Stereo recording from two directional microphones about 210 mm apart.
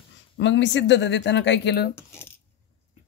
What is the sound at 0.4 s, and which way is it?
Speech, 60° left (ahead or behind).